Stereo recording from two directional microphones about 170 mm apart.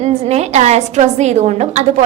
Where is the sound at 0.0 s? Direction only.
40° right (ahead or behind).